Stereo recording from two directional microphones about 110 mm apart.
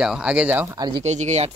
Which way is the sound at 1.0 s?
90° right.